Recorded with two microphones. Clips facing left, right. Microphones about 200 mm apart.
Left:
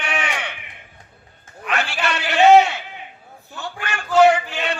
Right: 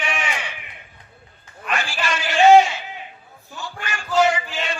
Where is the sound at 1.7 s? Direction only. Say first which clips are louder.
Left 2 dB; 65° left (ahead or behind).